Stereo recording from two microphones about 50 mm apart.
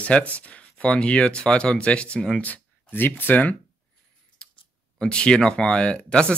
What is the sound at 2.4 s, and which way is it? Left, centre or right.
Speech, left.